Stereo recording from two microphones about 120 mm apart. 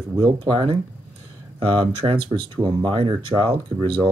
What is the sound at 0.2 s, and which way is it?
Speech, 40° right (ahead or behind).